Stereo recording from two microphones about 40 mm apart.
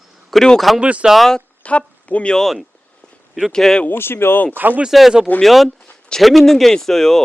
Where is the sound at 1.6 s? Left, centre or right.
Left.